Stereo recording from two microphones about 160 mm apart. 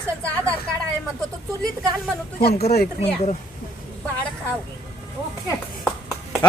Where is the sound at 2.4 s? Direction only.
85° left.